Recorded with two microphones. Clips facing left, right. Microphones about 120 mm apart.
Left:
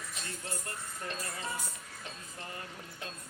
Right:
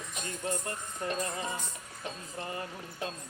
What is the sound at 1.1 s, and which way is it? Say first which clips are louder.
Music: right 7 dB; 15° right (ahead or behind).